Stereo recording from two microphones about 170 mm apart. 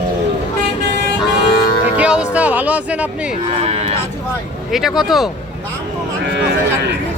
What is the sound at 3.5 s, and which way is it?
Speech, 35° right (ahead or behind).